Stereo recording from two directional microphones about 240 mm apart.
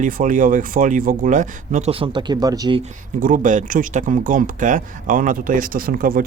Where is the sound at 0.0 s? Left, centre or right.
Right; by 2.8 s centre.